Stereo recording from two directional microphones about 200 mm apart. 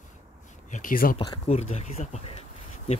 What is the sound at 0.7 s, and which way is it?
Speech, 45° left (ahead or behind).